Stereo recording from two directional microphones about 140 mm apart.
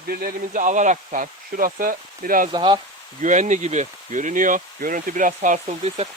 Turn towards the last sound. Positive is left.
turn(degrees=-50)  # may be behind; listen again after turning